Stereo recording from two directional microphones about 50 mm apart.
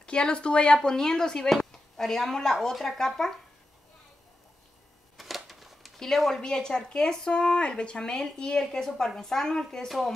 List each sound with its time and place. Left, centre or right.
0.0 s a woman's voice: centre
5.1 s a sound: centre
5.9 s a woman's voice: centre